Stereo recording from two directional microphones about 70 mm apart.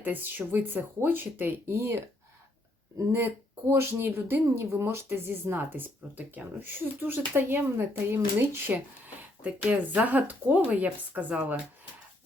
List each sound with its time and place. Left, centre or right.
0.0 s speech: right
3.1 s speech: right